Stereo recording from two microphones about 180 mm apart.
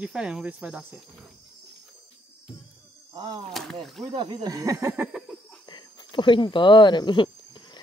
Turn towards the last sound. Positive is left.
turn(degrees=25)  # may be behind; listen again after turning